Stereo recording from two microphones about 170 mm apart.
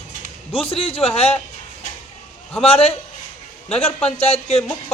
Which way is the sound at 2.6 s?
35° left (ahead or behind).